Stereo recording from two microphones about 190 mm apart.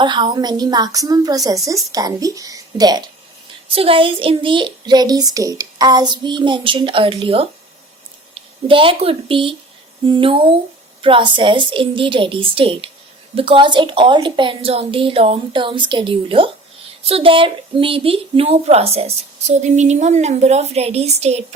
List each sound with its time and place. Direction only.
0.0 s a woman's voice: 25° right (ahead or behind)